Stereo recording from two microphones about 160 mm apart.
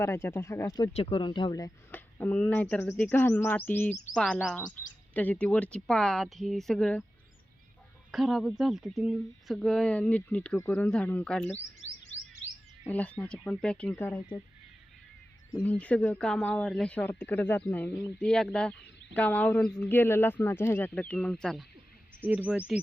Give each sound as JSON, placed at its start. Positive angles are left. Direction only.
{"t": 0.0, "sound": "speech", "side_deg": 15}
{"t": 0.9, "sound": "speech", "side_deg": 30}
{"t": 1.9, "sound": "speech", "side_deg": 10}
{"t": 8.1, "sound": "speech", "side_deg": 0}
{"t": 12.9, "sound": "speech", "side_deg": 10}
{"t": 15.6, "sound": "speech", "side_deg": 10}
{"t": 22.2, "sound": "speech", "side_deg": -10}